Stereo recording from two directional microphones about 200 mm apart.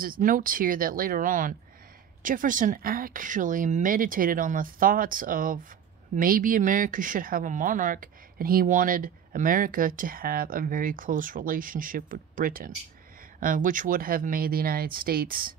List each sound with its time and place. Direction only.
0.0 s speech: 45° right (ahead or behind)